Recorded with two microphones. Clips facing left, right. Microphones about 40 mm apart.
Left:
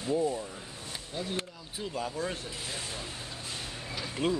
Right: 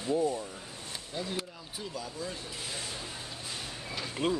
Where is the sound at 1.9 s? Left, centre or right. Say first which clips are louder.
Left 6 dB; left.